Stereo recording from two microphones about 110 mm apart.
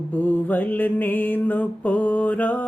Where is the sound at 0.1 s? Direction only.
15° left (ahead or behind).